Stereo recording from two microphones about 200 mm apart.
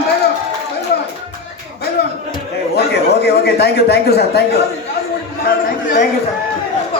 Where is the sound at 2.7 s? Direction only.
55° left (ahead or behind).